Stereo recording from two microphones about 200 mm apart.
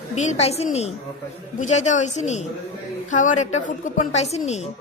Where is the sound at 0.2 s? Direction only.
35° left (ahead or behind).